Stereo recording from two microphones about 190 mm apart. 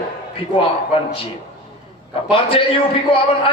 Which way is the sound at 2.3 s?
30° left (ahead or behind).